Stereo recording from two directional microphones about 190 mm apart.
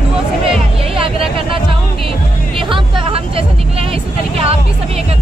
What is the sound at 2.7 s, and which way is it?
Vehicle, 30° right (ahead or behind).